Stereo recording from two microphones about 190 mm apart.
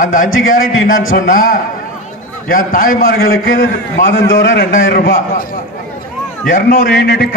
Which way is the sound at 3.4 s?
80° left.